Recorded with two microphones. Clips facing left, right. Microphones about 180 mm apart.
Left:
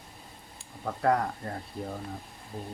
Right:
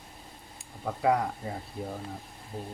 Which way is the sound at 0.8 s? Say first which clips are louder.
Even; 5° right (ahead or behind).